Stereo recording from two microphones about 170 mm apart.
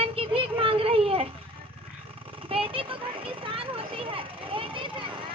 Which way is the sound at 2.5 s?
35° right (ahead or behind).